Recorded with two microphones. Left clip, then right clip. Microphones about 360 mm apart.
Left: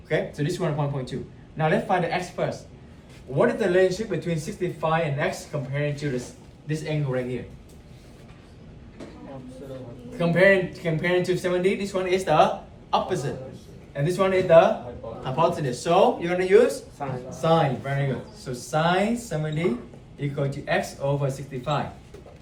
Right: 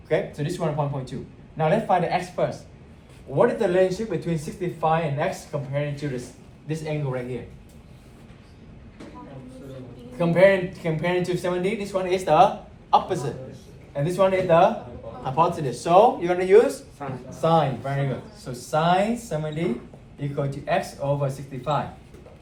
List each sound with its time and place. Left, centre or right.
0.1 s a man's voice: centre
10.2 s a man's voice: centre
17.0 s speech: left
17.4 s speech: centre